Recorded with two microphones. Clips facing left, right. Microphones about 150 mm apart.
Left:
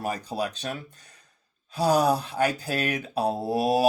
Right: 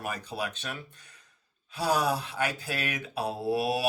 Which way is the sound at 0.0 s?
35° left (ahead or behind).